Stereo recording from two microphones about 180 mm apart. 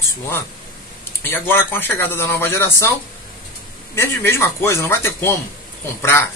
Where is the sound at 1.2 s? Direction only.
10° left (ahead or behind).